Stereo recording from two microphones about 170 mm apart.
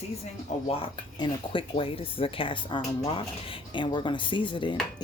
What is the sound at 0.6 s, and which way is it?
Speech, 30° left (ahead or behind).